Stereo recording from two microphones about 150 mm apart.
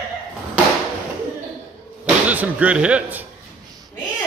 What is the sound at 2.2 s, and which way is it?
Speech, 10° right (ahead or behind).